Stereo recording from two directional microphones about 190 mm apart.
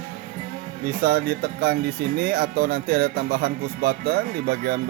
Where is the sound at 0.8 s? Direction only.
55° right (ahead or behind).